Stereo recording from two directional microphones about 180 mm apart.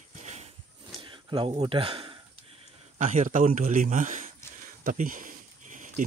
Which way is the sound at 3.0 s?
45° right (ahead or behind).